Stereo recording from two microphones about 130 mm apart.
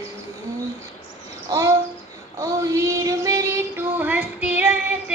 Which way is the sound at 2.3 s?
25° right (ahead or behind).